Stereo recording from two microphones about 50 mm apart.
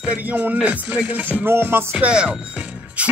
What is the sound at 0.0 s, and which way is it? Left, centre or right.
Music, right.